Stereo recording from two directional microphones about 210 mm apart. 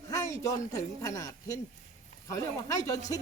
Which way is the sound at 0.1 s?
15° left (ahead or behind).